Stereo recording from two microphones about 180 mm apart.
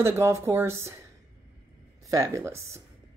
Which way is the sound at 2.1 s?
15° right (ahead or behind).